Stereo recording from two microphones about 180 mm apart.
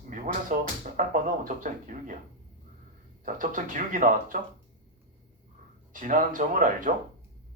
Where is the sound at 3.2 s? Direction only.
50° right (ahead or behind).